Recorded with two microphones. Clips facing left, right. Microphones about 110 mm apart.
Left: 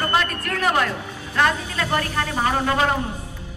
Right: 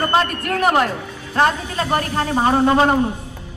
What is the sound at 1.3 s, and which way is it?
A woman's voice, 35° right (ahead or behind).